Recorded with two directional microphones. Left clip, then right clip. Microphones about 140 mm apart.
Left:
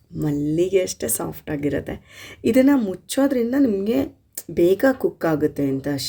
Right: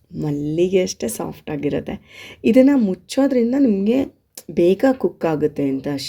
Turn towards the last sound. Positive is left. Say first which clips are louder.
# right 1 dB
turn(degrees=-15)  # may be behind; listen again after turning